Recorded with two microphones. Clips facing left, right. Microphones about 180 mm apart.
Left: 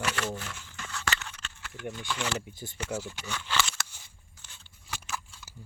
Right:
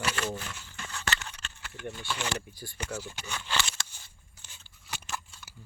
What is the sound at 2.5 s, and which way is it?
Speech, 20° left (ahead or behind).